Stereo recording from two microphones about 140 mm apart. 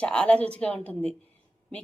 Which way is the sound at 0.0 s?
10° left (ahead or behind).